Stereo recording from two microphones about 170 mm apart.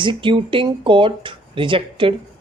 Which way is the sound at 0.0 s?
30° right (ahead or behind).